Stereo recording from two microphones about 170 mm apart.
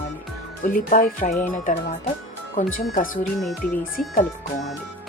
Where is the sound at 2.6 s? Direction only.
50° left (ahead or behind).